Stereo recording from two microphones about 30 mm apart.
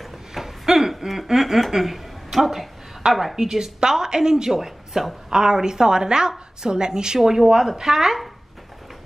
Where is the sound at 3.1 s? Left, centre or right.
Centre.